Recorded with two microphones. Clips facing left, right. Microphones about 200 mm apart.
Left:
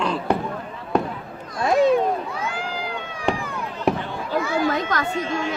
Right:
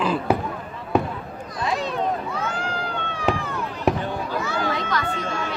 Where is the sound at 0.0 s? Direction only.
5° right (ahead or behind).